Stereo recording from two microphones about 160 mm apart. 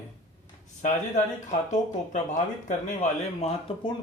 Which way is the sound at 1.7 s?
50° left (ahead or behind).